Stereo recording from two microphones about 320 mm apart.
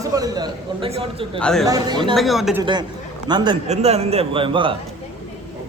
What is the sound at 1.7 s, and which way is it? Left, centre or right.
Speech, centre.